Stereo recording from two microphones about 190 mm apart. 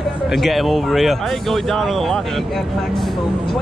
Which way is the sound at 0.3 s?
Centre (ahead or behind).